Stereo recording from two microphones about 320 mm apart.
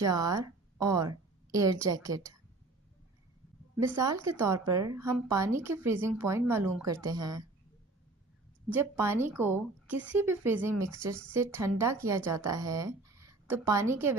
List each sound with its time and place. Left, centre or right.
0.0 s a woman's voice: centre
3.8 s speech: centre
8.7 s a woman's voice: centre